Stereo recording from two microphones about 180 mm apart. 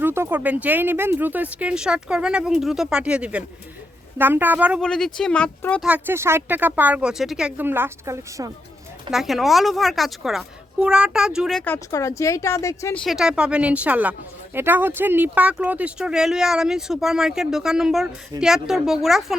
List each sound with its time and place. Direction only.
0.0 s speech: 10° right (ahead or behind)
4.8 s a woman's voice: 5° left (ahead or behind)
5.8 s speech: 10° right (ahead or behind)
9.0 s a woman's voice: centre (ahead or behind); by 13.0 s 15° left (ahead or behind)
13.0 s a woman's voice: centre (ahead or behind)